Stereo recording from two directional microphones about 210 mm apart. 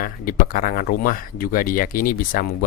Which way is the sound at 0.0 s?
40° left (ahead or behind).